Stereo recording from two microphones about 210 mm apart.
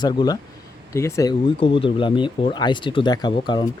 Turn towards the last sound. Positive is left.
turn(degrees=20)  # may be behind; listen again after turning